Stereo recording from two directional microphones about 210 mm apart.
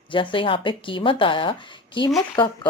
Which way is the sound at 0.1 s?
25° left (ahead or behind).